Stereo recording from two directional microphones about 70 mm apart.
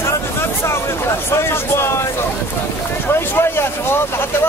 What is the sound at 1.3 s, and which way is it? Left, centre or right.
Speech, left.